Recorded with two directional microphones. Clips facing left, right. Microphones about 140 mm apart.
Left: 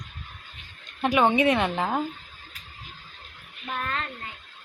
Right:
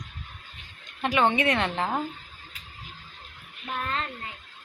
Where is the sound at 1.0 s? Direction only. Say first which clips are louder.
Left 3 dB; 10° left (ahead or behind).